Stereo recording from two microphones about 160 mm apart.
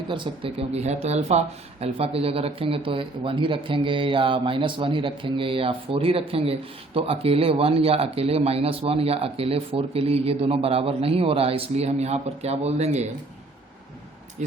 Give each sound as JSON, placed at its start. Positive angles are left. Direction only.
{"t": 0.1, "sound": "speech", "side_deg": -35}